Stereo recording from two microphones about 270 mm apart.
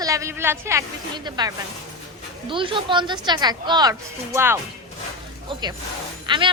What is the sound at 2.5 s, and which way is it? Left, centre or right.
A woman's voice, centre.